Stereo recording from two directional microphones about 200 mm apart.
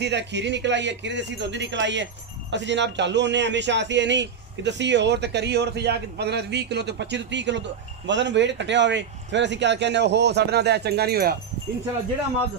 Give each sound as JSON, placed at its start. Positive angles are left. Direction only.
{"t": 0.0, "sound": "a man's voice", "side_deg": -60}